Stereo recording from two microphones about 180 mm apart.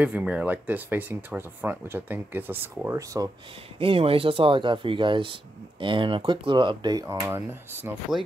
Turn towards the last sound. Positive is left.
turn(degrees=-15)  # may be behind; listen again after turning